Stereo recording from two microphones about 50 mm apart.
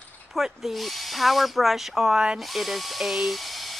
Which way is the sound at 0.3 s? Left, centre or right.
Centre.